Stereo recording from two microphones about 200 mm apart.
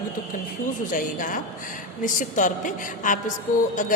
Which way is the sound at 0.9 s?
40° left (ahead or behind).